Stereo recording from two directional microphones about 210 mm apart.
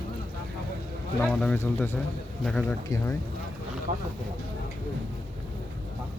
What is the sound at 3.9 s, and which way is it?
Speech, 40° right (ahead or behind).